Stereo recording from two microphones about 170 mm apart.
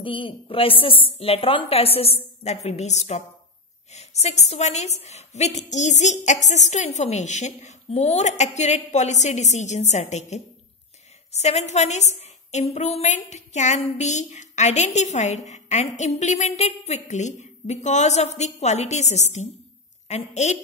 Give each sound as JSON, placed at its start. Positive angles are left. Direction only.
{"t": 0.0, "sound": "a woman's voice", "side_deg": 30}